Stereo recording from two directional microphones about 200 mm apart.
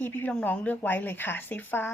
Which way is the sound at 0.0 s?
10° left (ahead or behind).